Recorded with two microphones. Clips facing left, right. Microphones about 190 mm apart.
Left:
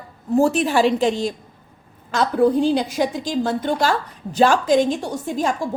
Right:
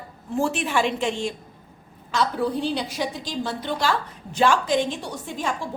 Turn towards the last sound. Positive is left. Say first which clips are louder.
# left 6 dB
turn(degrees=40)  # may be behind; listen again after turning